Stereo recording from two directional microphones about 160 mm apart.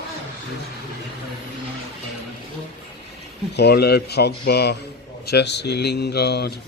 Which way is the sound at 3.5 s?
85° left.